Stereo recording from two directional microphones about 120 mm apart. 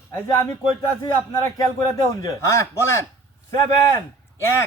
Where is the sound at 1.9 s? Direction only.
25° left (ahead or behind).